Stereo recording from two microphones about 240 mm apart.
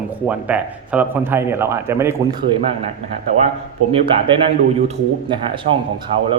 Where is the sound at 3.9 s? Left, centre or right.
Right.